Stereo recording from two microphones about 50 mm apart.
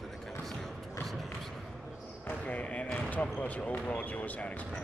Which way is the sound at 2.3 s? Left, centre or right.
Left.